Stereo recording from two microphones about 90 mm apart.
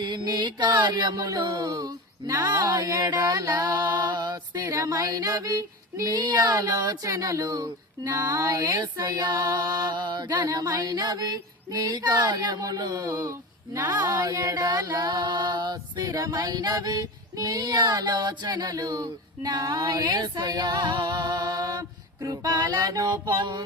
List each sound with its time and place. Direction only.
0.0 s mantra: 55° right (ahead or behind)
1.4 s speech: 50° right (ahead or behind)
21.8 s female singing: 45° right (ahead or behind)
22.6 s speech: 45° right (ahead or behind)